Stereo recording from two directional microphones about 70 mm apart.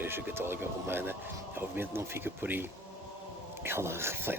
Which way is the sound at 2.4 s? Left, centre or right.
Right.